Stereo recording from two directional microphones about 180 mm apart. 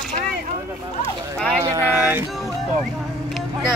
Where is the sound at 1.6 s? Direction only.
15° right (ahead or behind).